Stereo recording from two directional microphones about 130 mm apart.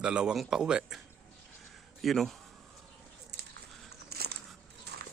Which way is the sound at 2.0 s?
Centre (ahead or behind).